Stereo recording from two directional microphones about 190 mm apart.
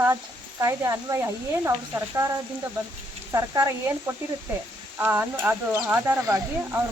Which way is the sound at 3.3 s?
15° right (ahead or behind).